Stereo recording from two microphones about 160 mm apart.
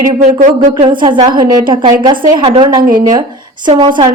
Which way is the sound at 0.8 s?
30° right (ahead or behind).